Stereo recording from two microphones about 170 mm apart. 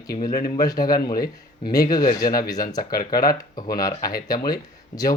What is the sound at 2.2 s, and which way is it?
Speech, 60° left (ahead or behind).